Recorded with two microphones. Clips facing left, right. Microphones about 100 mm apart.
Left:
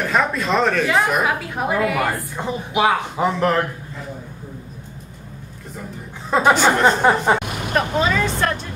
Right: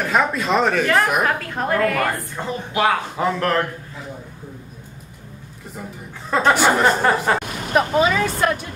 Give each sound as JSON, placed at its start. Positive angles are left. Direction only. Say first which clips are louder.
{"t": 0.0, "sound": "a woman's voice", "louder": "even", "side_deg": 0}
{"t": 6.5, "sound": "speech", "louder": "even", "side_deg": -10}
{"t": 7.0, "sound": "a woman's voice", "louder": "left 2 dB", "side_deg": 15}
{"t": 7.7, "sound": "speech", "louder": "right 2 dB", "side_deg": -10}